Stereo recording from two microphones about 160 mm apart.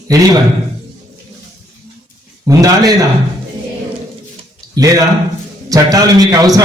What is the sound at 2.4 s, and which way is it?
Speech, 20° right (ahead or behind).